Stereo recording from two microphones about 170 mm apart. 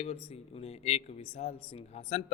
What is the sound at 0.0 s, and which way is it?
A man's voice, 35° left (ahead or behind).